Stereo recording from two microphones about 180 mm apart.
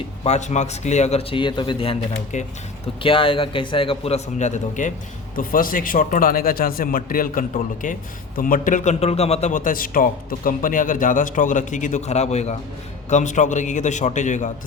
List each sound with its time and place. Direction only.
0.3 s a man's voice: 40° left (ahead or behind)